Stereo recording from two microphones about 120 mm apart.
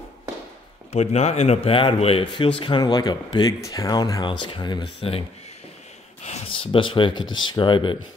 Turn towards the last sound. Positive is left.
turn(degrees=40)  # may be behind; listen again after turning